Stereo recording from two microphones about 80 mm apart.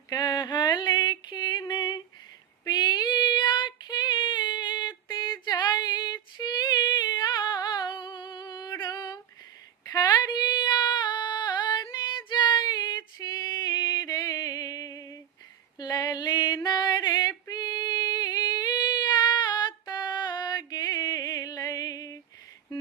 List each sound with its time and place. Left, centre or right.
0.1 s a sound: left
2.6 s female singing: left
13.1 s music: left
15.8 s a sound: left
16.6 s female singing: left
17.5 s singing: left